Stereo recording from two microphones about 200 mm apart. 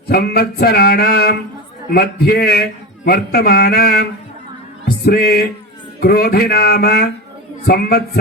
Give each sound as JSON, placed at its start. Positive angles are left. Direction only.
{"t": 0.1, "sound": "a man's voice", "side_deg": 50}
{"t": 5.0, "sound": "a man's voice", "side_deg": 50}